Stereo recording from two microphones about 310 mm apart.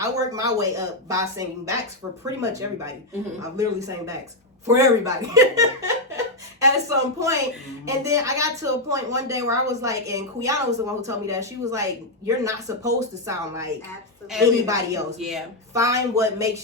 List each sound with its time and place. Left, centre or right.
0.0 s a woman's voice: centre